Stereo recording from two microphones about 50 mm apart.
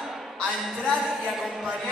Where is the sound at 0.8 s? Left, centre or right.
Centre.